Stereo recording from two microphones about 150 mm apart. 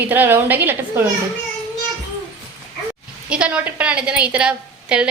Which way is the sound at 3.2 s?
5° right (ahead or behind).